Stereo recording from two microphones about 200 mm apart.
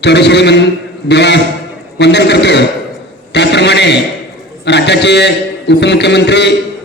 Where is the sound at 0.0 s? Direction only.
60° left (ahead or behind).